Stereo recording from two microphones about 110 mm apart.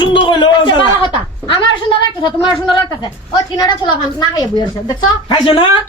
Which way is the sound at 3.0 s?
40° left (ahead or behind).